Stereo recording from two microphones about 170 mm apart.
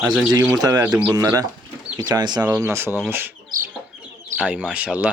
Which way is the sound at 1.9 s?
10° right (ahead or behind).